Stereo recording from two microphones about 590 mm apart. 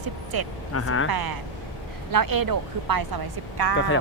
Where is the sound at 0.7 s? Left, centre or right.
Left.